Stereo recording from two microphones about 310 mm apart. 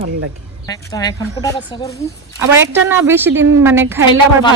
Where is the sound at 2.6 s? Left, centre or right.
Centre.